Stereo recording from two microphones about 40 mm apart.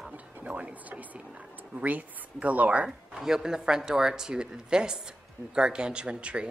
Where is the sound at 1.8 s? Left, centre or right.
Right.